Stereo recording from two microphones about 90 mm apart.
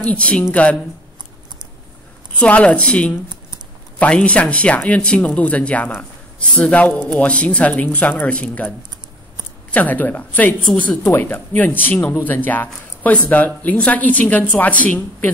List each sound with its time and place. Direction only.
0.1 s speech: 15° left (ahead or behind)
2.3 s speech: 15° left (ahead or behind)